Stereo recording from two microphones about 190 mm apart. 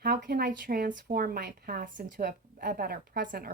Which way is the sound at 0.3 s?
50° right (ahead or behind).